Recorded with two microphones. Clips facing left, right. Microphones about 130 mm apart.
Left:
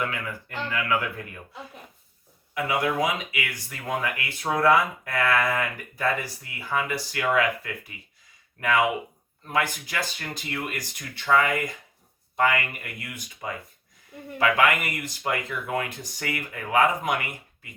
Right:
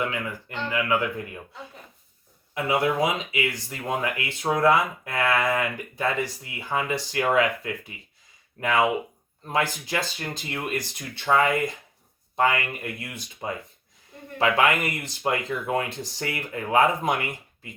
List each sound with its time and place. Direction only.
0.0 s speech: 20° right (ahead or behind)
2.6 s speech: 25° right (ahead or behind)